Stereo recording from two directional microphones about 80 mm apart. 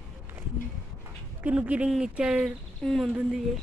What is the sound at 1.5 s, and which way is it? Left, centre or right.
Speech, centre.